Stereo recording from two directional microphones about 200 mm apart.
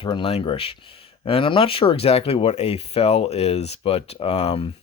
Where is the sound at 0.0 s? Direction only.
25° left (ahead or behind).